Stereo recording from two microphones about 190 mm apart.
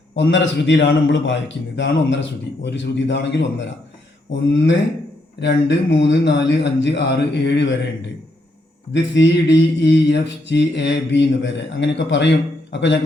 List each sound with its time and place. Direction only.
0.2 s a man's voice: 70° left (ahead or behind)
5.4 s a man's voice: 65° left (ahead or behind)
8.9 s a man's voice: 70° left (ahead or behind)